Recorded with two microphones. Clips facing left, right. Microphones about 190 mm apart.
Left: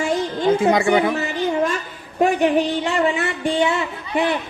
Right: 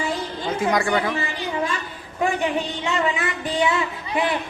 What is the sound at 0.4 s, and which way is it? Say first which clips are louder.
Speech: left 6 dB; 25° left (ahead or behind).